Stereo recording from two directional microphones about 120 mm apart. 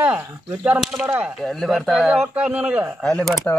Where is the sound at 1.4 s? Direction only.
Centre (ahead or behind).